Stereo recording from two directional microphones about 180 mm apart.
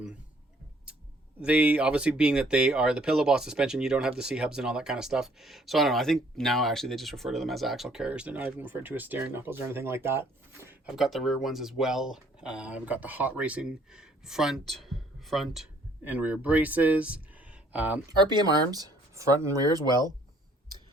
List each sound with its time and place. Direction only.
1.4 s speech: 5° right (ahead or behind)
18.3 s speech: 25° right (ahead or behind)